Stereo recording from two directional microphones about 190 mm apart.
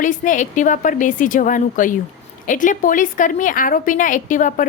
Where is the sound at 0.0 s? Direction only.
40° left (ahead or behind).